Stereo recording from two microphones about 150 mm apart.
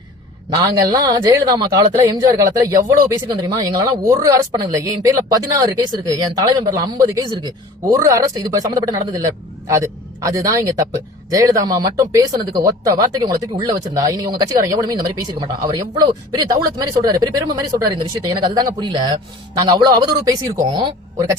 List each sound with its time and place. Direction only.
0.5 s speech: 25° right (ahead or behind)